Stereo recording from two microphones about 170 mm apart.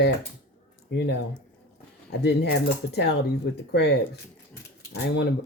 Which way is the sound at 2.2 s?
75° left (ahead or behind).